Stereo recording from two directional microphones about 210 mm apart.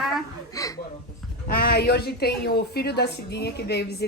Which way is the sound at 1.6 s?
50° left (ahead or behind).